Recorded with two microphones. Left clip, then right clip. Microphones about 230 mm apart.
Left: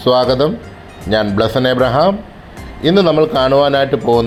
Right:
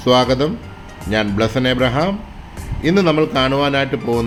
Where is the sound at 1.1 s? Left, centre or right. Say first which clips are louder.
Left 4 dB; centre.